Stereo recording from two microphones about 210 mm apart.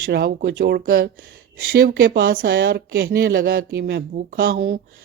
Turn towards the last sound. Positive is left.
turn(degrees=-45)  # may be behind; listen again after turning